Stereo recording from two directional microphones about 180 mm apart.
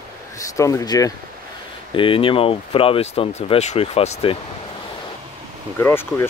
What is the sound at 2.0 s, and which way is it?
Speech, 30° left (ahead or behind).